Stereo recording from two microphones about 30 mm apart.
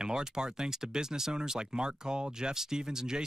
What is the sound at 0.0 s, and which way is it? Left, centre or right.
Speech, right.